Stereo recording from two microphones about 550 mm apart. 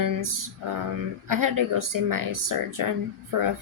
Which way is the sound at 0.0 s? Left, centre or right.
Right.